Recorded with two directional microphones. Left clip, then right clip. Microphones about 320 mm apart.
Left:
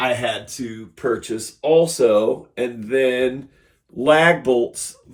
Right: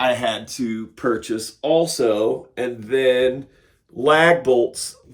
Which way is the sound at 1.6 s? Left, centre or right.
Centre.